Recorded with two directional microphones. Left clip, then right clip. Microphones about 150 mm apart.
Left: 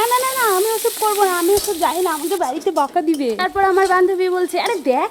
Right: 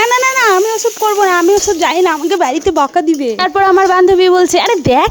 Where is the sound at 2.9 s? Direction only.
15° right (ahead or behind).